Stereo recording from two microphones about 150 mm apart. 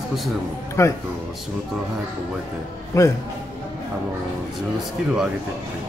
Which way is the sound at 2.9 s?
20° left (ahead or behind).